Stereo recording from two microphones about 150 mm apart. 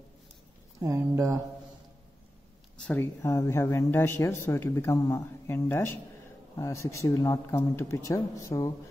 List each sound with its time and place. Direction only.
0.7 s speech: 20° right (ahead or behind)
2.8 s speech: 10° left (ahead or behind)